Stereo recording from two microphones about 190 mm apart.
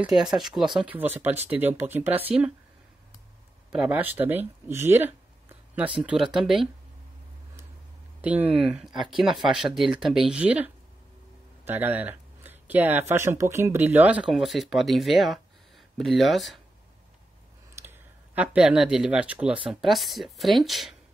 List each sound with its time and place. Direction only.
0.0 s speech: 5° right (ahead or behind)
3.7 s speech: 5° right (ahead or behind)
8.2 s speech: 10° right (ahead or behind)
17.7 s speech: 10° right (ahead or behind)